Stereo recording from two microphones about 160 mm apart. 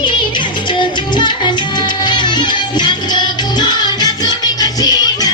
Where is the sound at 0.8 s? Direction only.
30° left (ahead or behind).